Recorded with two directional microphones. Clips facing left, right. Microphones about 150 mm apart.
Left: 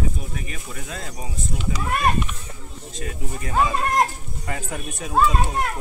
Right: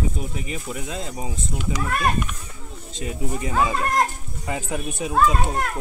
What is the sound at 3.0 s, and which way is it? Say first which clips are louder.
Speech: right 5 dB; 20° right (ahead or behind).